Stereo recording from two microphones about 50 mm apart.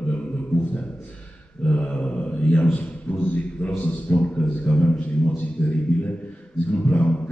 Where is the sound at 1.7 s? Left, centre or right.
Left.